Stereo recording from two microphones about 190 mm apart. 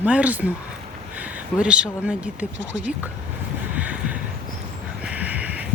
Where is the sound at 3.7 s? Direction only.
5° right (ahead or behind).